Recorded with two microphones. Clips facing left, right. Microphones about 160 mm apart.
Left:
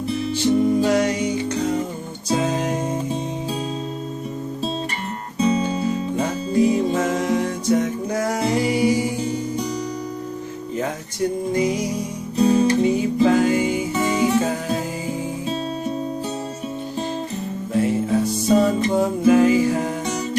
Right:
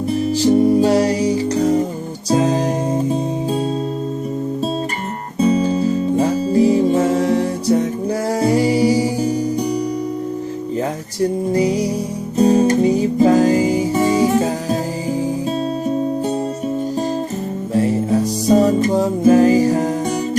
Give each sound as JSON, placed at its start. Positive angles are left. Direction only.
{"t": 0.1, "sound": "music", "side_deg": -40}
{"t": 5.5, "sound": "music", "side_deg": -35}
{"t": 10.8, "sound": "music", "side_deg": -35}
{"t": 17.7, "sound": "music", "side_deg": -35}